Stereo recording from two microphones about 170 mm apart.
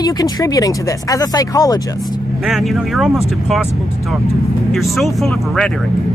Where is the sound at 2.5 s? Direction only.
Centre (ahead or behind).